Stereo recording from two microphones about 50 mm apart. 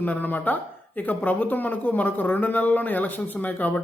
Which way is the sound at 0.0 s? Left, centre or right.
Left.